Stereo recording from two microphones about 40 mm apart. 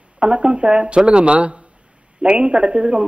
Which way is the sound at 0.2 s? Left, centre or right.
Right.